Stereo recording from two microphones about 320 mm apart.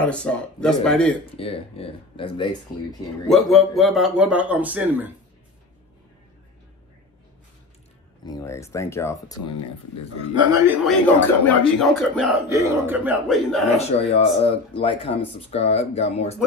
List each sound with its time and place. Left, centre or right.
0.0 s a man's voice: centre
1.3 s speech: centre
3.3 s a man's voice: centre
8.3 s speech: centre
10.3 s speech: centre
10.8 s a man's voice: centre
13.7 s speech: centre